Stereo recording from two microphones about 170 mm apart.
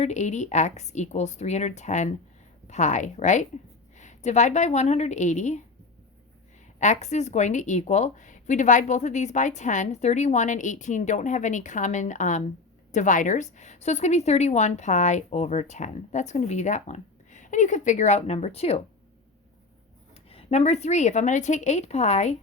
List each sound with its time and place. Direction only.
0.0 s a woman's voice: 45° left (ahead or behind)
6.7 s a woman's voice: 45° left (ahead or behind)
20.3 s a woman's voice: 40° left (ahead or behind)